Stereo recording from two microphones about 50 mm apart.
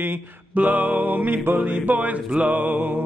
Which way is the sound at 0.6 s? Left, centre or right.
Right.